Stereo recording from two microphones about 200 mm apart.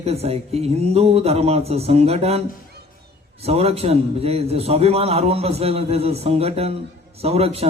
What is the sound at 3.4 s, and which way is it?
A man's voice, 30° right (ahead or behind).